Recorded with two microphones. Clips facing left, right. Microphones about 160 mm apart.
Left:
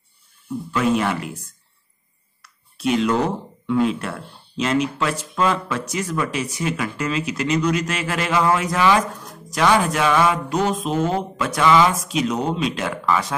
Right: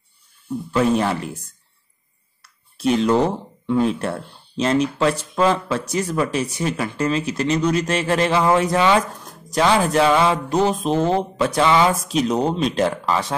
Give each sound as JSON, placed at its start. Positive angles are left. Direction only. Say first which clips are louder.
{"t": 0.7, "sound": "speech", "louder": "right 2 dB", "side_deg": -30}
{"t": 2.4, "sound": "a sound", "louder": "right 2 dB", "side_deg": -30}
{"t": 3.6, "sound": "speech", "louder": "right 1 dB", "side_deg": -30}
{"t": 9.5, "sound": "music", "louder": "right 1 dB", "side_deg": -30}
{"t": 10.8, "sound": "speech", "louder": "right 3 dB", "side_deg": -30}